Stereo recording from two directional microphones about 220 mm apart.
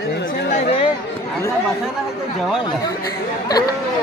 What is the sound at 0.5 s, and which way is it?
Chatter, 30° left (ahead or behind).